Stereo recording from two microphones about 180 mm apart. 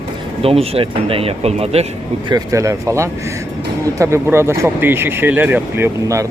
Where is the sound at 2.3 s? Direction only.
20° right (ahead or behind).